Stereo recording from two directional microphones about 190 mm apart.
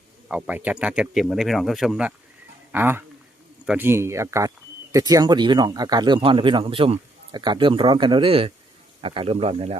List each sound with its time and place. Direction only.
0.3 s speech: 5° right (ahead or behind); by 9.7 s 30° right (ahead or behind)